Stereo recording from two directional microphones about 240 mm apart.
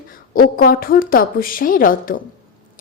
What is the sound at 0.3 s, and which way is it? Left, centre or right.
A woman's voice, left.